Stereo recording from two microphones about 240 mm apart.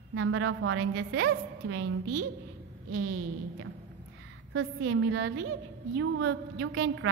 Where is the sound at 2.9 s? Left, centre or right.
Right.